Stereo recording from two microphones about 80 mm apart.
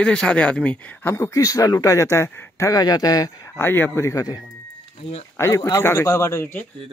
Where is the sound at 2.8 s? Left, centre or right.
Left.